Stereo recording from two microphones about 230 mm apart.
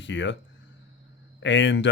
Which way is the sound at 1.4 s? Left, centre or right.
Left.